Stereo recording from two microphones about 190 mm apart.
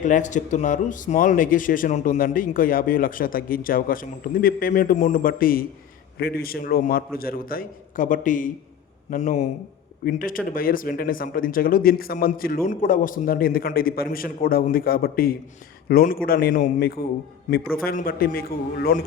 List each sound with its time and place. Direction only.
0.0 s a man's voice: 40° left (ahead or behind)